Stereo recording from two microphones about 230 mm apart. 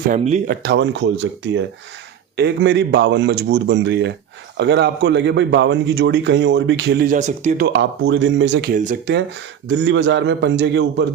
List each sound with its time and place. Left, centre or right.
0.1 s a man's voice: right
7.7 s a man's voice: right
8.7 s speech: right
9.6 s a man's voice: right